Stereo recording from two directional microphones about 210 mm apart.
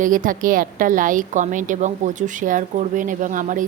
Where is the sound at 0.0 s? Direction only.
40° right (ahead or behind).